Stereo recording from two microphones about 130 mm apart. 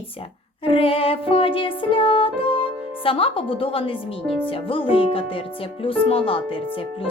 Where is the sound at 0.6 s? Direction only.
45° left (ahead or behind).